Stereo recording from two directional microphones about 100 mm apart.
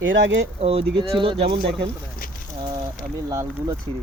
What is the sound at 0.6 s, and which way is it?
Speech, 75° right (ahead or behind).